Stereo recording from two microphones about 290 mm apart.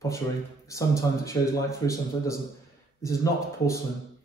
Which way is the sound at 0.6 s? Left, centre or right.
Centre.